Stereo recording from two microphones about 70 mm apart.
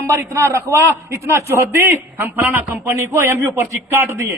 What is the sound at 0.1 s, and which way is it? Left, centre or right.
A man's voice, right.